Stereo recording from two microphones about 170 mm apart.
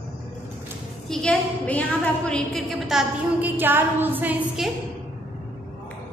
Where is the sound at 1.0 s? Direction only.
5° left (ahead or behind).